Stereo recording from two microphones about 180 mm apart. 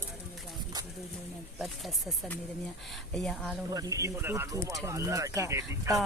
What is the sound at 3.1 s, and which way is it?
Speech, centre (ahead or behind).